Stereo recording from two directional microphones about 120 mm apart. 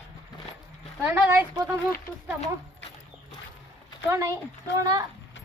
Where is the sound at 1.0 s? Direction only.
15° right (ahead or behind).